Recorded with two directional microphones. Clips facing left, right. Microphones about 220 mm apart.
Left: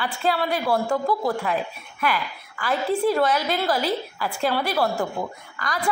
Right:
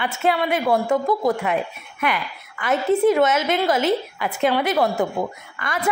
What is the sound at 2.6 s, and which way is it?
A woman's voice, 20° right (ahead or behind).